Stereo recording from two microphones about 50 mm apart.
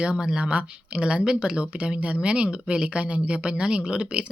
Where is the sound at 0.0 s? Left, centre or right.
Centre.